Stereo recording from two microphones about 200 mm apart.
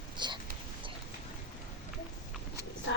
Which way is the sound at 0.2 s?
20° right (ahead or behind).